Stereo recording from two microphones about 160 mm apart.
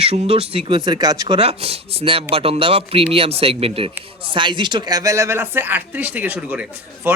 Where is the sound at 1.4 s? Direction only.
40° right (ahead or behind).